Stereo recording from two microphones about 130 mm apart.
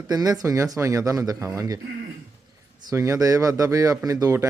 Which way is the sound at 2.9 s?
25° right (ahead or behind).